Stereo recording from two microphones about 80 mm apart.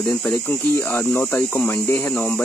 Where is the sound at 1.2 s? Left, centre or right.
Left.